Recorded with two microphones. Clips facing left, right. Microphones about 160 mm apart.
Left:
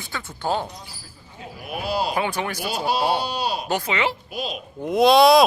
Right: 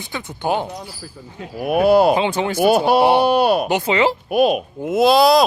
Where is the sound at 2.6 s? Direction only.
55° right (ahead or behind).